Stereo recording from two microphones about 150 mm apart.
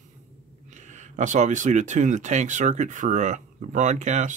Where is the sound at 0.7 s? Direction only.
55° right (ahead or behind).